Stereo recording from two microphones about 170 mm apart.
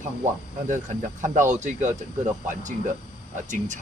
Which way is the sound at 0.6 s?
45° right (ahead or behind).